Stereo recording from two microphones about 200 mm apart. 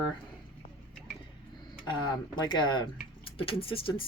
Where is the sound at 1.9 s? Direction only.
25° left (ahead or behind).